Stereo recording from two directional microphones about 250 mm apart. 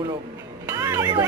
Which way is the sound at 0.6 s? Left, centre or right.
Centre.